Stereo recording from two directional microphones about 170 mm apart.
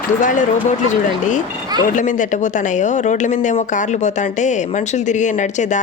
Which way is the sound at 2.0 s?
50° left (ahead or behind).